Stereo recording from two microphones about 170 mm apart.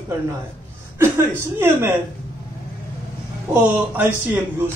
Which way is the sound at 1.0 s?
15° right (ahead or behind).